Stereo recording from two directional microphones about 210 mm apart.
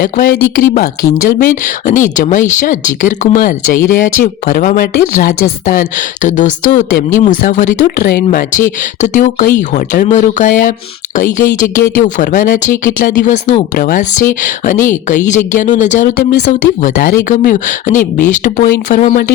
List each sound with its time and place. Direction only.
0.0 s speech: 40° left (ahead or behind)